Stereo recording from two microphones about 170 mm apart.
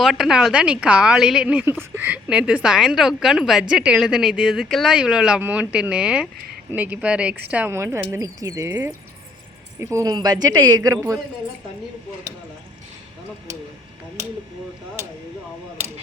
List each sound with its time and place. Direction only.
0.0 s a woman's voice: centre (ahead or behind); by 11.2 s 20° right (ahead or behind)